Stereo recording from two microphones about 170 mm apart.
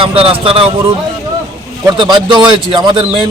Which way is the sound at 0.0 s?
35° right (ahead or behind).